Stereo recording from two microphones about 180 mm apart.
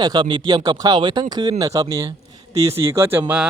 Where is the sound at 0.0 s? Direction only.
20° right (ahead or behind).